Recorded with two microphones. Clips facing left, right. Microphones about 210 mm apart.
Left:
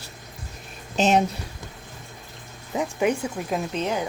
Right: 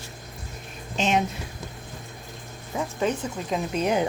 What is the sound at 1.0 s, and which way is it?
Speech, 40° left (ahead or behind).